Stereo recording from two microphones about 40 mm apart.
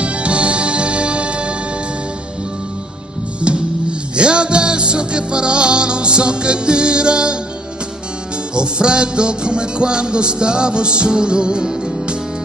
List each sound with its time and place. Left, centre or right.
0.0 s music: right
3.3 s music: right
8.5 s music: right